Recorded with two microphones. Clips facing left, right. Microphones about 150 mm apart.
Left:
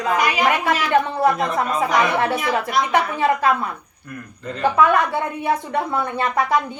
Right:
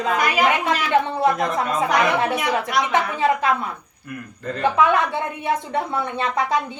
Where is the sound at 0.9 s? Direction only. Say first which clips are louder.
Left 1 dB; 20° right (ahead or behind).